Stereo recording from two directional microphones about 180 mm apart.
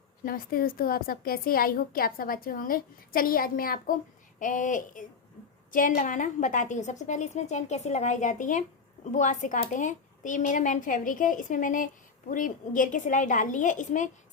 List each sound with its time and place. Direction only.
0.3 s a woman's voice: 55° left (ahead or behind)